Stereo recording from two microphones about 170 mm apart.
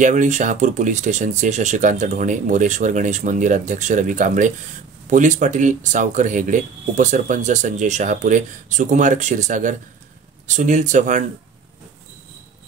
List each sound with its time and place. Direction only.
0.0 s speech: 45° right (ahead or behind)